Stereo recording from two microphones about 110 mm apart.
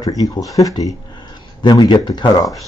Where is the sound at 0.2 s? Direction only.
30° left (ahead or behind).